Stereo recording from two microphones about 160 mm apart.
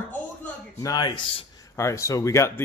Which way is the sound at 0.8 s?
25° left (ahead or behind).